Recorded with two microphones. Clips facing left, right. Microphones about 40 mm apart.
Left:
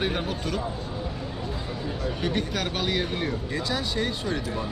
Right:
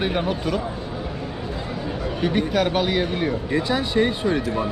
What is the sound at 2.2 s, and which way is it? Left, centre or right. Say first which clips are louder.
Speech: right 9 dB; centre.